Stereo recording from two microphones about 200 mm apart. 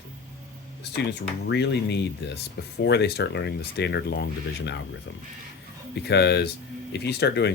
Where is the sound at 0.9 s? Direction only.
55° left (ahead or behind).